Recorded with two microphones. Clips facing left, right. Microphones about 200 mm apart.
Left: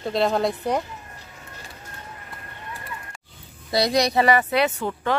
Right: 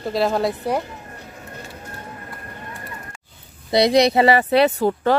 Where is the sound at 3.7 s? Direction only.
25° right (ahead or behind).